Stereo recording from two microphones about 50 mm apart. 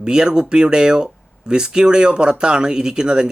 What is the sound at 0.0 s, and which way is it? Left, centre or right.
Speech, centre.